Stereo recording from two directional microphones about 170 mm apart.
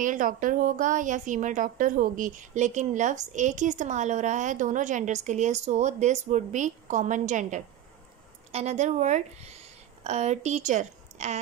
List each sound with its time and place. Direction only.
0.0 s a woman's voice: 50° right (ahead or behind)